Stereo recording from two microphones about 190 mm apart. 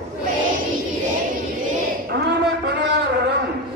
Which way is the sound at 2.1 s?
60° right (ahead or behind).